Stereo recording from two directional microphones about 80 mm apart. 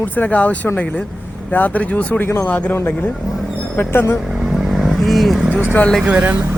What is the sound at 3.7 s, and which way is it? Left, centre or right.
Speech, left.